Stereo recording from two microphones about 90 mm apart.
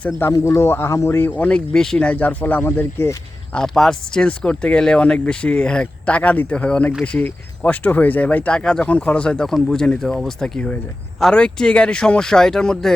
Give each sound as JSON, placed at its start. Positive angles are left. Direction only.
{"t": 0.3, "sound": "speech", "side_deg": 35}
{"t": 3.5, "sound": "speech", "side_deg": 5}